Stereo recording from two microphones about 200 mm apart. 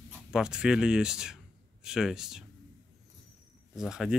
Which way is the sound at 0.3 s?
5° right (ahead or behind).